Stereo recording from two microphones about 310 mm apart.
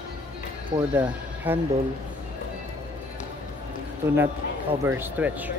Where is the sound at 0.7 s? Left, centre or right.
Centre.